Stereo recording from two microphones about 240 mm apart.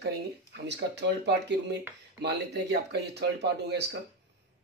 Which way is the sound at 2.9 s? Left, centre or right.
Right.